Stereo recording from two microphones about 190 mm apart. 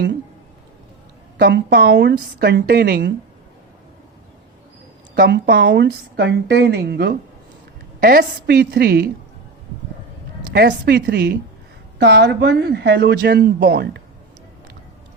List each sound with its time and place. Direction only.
1.4 s a woman's voice: 60° right (ahead or behind)
5.1 s a woman's voice: 60° right (ahead or behind)
10.5 s a woman's voice: 60° right (ahead or behind)